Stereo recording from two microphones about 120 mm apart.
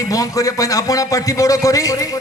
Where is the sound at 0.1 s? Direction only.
30° left (ahead or behind).